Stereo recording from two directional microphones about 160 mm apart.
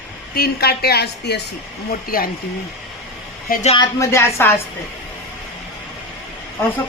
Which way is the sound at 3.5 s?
50° left (ahead or behind).